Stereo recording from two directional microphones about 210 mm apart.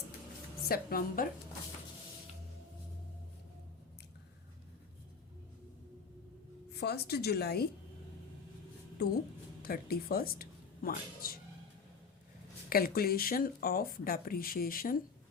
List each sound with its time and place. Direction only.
0.7 s speech: 45° left (ahead or behind)
6.7 s speech: 50° left (ahead or behind)
9.6 s speech: 45° left (ahead or behind)
12.6 s speech: 45° left (ahead or behind)